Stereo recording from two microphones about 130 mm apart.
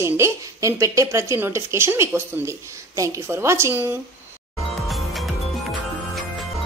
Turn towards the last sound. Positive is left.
turn(degrees=0)  # may be behind; listen again after turning